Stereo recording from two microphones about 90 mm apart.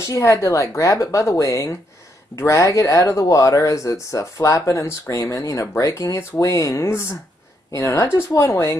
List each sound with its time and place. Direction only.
0.0 s speech: 35° left (ahead or behind)